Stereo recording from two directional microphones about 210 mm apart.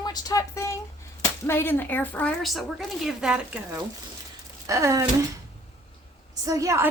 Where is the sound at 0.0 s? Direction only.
20° left (ahead or behind); by 3.6 s 5° right (ahead or behind).